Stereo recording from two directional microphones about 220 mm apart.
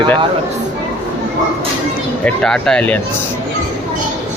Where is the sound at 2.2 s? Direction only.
5° left (ahead or behind).